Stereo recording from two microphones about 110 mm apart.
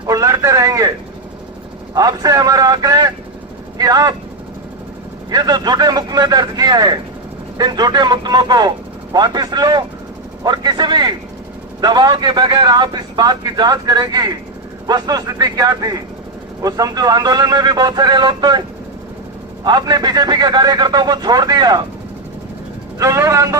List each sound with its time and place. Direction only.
0.0 s speech: 30° right (ahead or behind)
2.0 s a man's voice: 35° right (ahead or behind)
5.3 s a man's voice: 35° right (ahead or behind)
19.6 s a man's voice: 40° right (ahead or behind)
23.0 s a man's voice: 30° right (ahead or behind)